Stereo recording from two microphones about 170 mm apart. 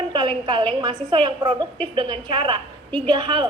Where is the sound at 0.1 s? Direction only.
25° right (ahead or behind).